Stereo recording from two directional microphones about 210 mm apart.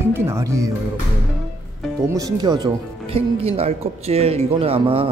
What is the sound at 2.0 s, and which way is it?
Speech, 15° right (ahead or behind).